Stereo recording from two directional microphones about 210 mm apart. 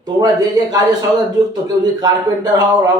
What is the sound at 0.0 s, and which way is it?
A man's voice, 15° right (ahead or behind).